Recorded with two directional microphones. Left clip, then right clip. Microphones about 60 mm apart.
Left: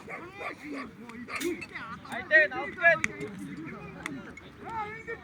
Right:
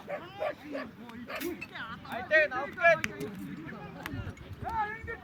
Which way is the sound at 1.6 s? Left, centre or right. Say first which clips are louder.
Left 1 dB; centre.